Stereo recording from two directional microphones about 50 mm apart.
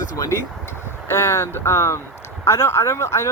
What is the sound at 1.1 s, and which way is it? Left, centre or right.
Speech, left.